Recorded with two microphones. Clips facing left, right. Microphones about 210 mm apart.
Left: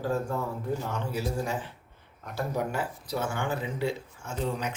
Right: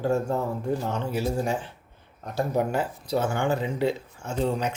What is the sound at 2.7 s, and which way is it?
Speech, 25° right (ahead or behind).